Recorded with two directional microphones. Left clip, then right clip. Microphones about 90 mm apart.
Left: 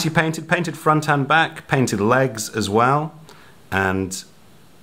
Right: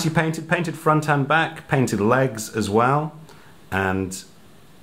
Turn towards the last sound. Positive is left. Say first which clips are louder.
# left 2 dB
turn(degrees=35)  # may be behind; listen again after turning